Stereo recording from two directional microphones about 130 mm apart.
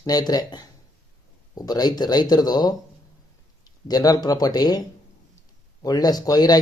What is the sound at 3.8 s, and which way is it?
Speech, 30° left (ahead or behind).